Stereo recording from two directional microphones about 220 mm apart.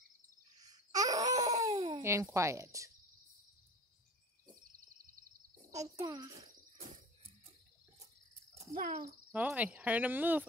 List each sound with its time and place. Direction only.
0.6 s babbling: 15° right (ahead or behind)
5.7 s speech: 15° right (ahead or behind)
6.8 s a sound: 25° right (ahead or behind)
8.7 s a child's voice: 35° right (ahead or behind)
9.3 s speech: 5° right (ahead or behind)